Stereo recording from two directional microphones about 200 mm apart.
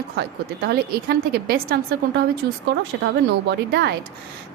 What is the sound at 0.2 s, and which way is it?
A woman's voice, 55° right (ahead or behind).